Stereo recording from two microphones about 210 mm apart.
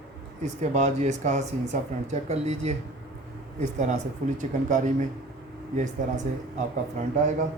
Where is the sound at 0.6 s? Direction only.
35° right (ahead or behind).